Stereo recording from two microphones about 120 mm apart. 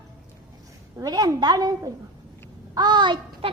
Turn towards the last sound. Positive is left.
turn(degrees=-40)  # may be behind; listen again after turning